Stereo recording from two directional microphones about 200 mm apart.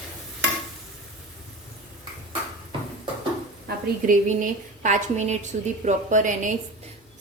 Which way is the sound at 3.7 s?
40° right (ahead or behind).